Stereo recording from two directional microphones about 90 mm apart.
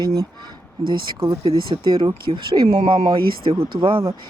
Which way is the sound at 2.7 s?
70° right (ahead or behind).